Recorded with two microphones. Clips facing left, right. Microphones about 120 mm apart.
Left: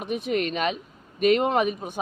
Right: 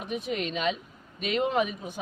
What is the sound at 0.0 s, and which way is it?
A woman's voice, 60° left (ahead or behind).